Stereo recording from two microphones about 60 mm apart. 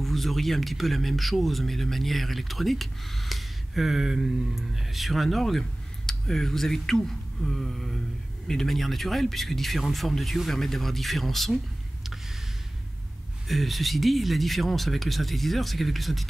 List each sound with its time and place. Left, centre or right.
0.0 s speech: centre
13.5 s speech: centre